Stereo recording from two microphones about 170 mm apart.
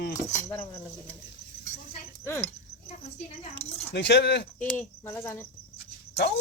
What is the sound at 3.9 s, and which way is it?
Speech, 85° left.